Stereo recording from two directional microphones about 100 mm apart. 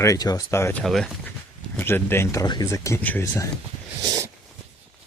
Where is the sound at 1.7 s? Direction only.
20° left (ahead or behind).